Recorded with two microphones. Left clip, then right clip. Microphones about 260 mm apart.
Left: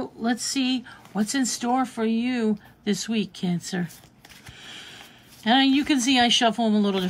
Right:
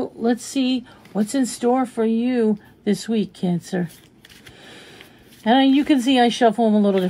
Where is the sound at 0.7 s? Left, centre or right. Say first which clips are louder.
Right 3 dB; left.